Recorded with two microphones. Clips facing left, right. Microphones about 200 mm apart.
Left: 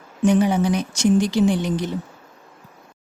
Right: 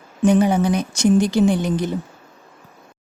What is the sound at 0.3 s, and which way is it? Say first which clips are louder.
Speech: right 2 dB; 45° right (ahead or behind).